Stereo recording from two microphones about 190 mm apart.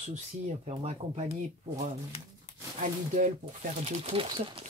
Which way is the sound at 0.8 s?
35° right (ahead or behind).